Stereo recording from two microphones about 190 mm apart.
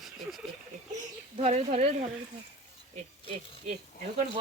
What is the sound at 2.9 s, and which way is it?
Insect, 35° right (ahead or behind).